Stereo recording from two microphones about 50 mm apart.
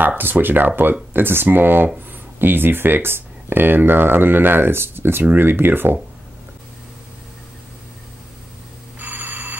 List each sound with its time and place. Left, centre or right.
0.2 s speech: right
9.0 s telephone: right